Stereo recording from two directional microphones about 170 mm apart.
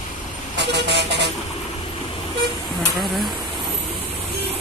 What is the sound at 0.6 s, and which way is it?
Vehicle, 90° right.